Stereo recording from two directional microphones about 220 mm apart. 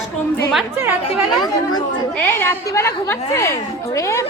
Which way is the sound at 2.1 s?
10° left (ahead or behind).